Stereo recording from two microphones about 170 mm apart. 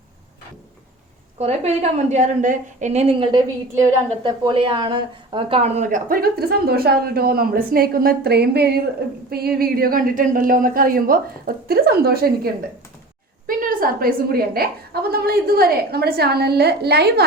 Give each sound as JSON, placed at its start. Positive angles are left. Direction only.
{"t": 1.4, "sound": "a woman's voice", "side_deg": -40}
{"t": 13.5, "sound": "a woman's voice", "side_deg": -55}